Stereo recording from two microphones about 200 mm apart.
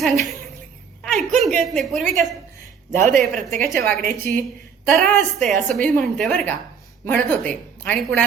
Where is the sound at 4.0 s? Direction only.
45° right (ahead or behind).